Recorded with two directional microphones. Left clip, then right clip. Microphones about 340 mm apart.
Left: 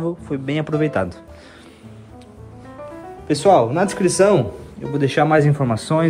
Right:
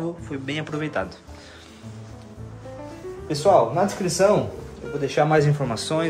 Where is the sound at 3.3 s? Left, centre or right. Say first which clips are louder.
Left 4 dB; left.